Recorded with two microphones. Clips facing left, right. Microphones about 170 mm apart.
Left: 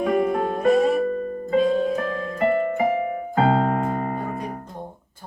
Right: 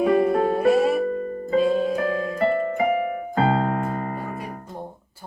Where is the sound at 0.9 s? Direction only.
50° left (ahead or behind).